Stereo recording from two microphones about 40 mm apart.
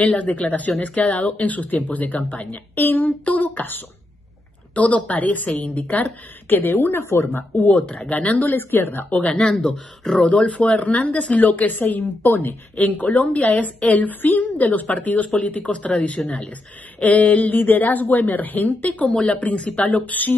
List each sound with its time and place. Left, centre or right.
0.0 s speech: left
2.4 s speech: left
3.1 s a woman's voice: left
4.7 s speech: left
6.5 s speech: left
8.1 s speech: left
8.5 s speech: left
9.3 s speech: centre
10.1 s speech: left
16.3 s speech: left
17.0 s a woman's voice: left
18.9 s speech: left